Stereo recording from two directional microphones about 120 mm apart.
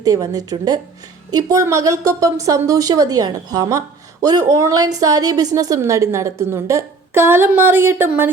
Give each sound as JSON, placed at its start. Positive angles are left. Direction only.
{"t": 0.0, "sound": "a woman's voice", "side_deg": -30}